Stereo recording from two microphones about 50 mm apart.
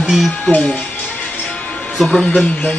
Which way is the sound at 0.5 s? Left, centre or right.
Left.